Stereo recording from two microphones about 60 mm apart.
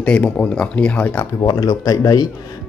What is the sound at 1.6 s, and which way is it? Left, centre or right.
Speech, left.